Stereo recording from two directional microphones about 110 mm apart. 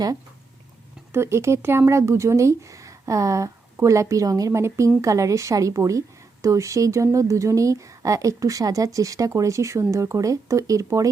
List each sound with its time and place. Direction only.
1.1 s a woman's voice: 25° right (ahead or behind)